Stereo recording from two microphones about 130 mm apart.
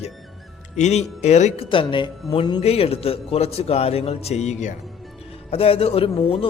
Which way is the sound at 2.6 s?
50° left (ahead or behind).